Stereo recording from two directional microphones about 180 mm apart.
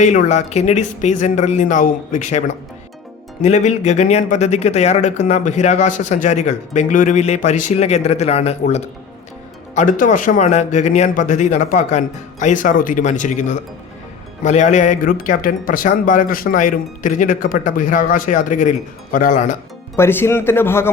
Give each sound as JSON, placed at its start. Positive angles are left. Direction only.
{"t": 0.0, "sound": "speech", "side_deg": 40}
{"t": 3.4, "sound": "speech", "side_deg": 40}
{"t": 20.0, "sound": "speech", "side_deg": 15}